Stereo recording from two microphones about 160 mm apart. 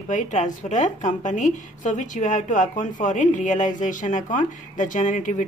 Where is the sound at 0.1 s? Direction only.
50° left (ahead or behind).